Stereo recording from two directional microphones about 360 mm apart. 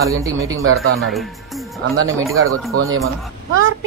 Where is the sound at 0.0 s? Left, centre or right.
Centre.